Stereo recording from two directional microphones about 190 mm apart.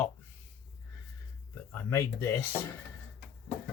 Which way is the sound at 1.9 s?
15° left (ahead or behind).